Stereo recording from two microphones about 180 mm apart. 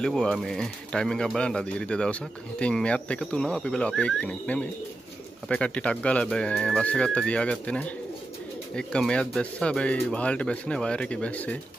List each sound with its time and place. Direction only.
0.0 s speech: 5° left (ahead or behind)